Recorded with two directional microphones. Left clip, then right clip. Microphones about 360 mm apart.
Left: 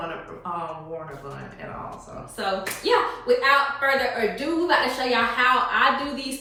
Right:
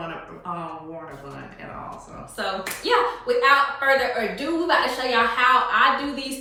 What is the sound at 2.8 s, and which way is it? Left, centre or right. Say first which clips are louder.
Speech: right 1 dB; centre.